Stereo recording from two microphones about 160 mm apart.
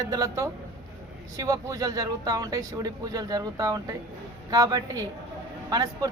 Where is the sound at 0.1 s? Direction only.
25° right (ahead or behind).